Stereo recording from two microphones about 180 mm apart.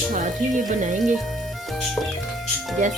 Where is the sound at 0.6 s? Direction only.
45° right (ahead or behind).